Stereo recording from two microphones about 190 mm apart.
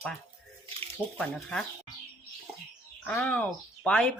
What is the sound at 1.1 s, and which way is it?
Speech, 5° left (ahead or behind).